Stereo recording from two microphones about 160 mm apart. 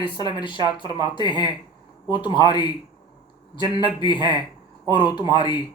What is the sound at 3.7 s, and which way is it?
Speech, 30° left (ahead or behind).